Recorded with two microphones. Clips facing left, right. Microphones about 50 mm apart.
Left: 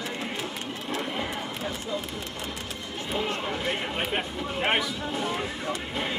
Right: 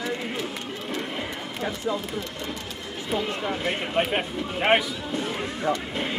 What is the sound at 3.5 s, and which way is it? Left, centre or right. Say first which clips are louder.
Speech: right 2 dB; centre.